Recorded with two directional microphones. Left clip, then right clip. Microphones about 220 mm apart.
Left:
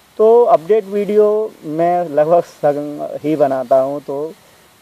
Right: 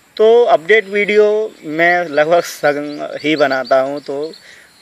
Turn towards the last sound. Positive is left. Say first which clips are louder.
# even
turn(degrees=-25)  # may be behind; listen again after turning